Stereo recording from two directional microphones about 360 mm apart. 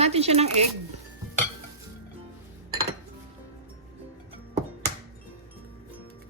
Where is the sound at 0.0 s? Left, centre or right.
Centre.